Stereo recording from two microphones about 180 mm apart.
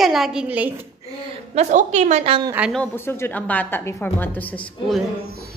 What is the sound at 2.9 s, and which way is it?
A woman's voice, 15° left (ahead or behind).